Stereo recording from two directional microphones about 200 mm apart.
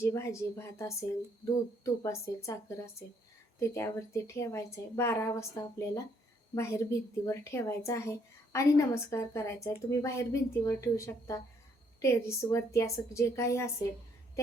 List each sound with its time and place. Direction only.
0.0 s a woman's voice: 15° left (ahead or behind)